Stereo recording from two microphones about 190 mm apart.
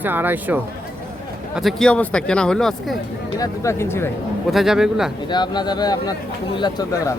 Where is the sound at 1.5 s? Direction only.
Centre (ahead or behind).